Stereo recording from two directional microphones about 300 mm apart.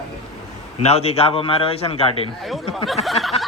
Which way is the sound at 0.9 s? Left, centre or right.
Left.